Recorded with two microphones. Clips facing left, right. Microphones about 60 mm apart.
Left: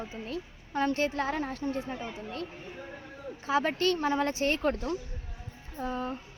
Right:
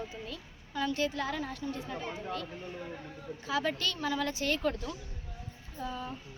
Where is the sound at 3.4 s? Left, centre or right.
Left.